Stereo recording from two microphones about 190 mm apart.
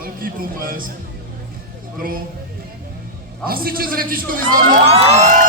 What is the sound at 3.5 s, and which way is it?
A man's voice, 50° right (ahead or behind).